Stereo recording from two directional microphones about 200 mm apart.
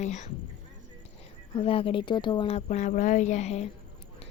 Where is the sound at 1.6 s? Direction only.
25° left (ahead or behind).